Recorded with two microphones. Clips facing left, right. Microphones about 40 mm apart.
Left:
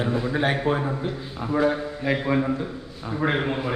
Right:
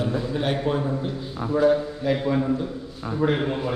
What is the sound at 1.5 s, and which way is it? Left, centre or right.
A man's voice, left.